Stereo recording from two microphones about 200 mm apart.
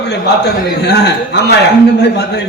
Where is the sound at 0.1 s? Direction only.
55° left (ahead or behind).